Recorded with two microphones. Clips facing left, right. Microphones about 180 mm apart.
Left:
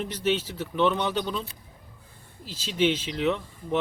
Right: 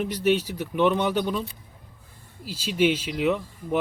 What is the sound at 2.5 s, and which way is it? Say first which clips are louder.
Speech: right 2 dB; 10° right (ahead or behind).